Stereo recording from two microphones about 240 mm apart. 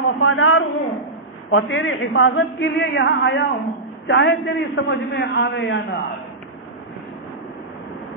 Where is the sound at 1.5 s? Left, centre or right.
Left.